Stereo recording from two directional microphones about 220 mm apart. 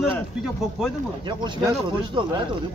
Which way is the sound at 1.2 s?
20° right (ahead or behind).